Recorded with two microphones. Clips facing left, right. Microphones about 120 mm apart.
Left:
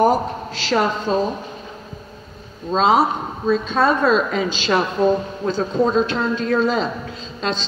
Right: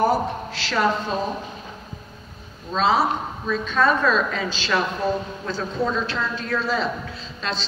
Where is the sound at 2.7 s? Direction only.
25° left (ahead or behind).